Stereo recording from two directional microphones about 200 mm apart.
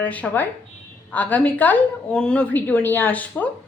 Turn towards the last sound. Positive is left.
turn(degrees=10)  # may be behind; listen again after turning